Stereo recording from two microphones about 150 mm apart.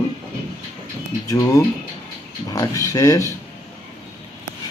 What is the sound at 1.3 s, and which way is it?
Speech, 25° left (ahead or behind).